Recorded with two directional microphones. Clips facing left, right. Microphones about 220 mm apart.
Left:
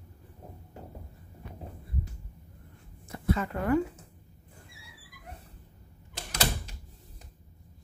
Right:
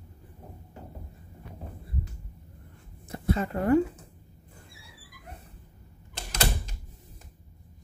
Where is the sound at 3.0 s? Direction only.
30° right (ahead or behind).